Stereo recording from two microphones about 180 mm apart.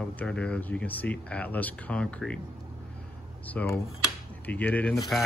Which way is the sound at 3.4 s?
10° left (ahead or behind).